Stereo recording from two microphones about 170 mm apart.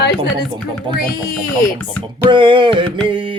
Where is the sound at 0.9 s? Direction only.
30° right (ahead or behind).